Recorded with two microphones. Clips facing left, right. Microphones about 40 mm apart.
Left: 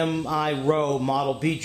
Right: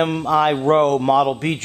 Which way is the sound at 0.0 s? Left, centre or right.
Right.